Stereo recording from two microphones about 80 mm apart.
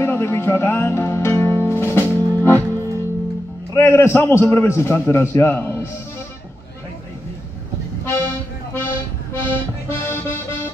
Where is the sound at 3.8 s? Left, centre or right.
Left.